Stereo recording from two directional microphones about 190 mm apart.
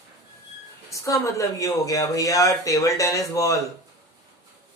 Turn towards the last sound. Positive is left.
turn(degrees=15)  # may be behind; listen again after turning